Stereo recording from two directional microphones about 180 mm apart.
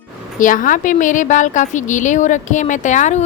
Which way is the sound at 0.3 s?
45° left (ahead or behind).